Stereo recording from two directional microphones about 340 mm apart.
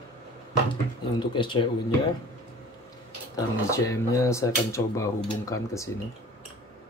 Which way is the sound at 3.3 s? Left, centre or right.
Centre.